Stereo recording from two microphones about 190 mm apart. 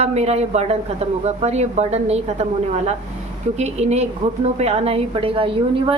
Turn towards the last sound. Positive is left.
turn(degrees=-30)  # may be behind; listen again after turning